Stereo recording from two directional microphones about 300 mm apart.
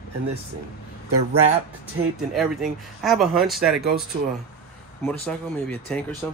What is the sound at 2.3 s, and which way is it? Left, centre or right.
Speech, centre.